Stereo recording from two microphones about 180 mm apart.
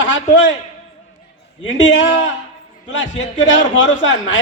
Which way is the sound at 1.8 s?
85° left.